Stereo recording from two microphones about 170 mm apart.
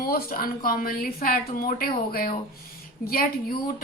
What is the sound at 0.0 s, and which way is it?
Speech, 60° left (ahead or behind).